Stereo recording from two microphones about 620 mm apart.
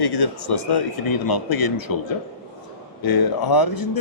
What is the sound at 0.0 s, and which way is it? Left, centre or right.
Speech, left.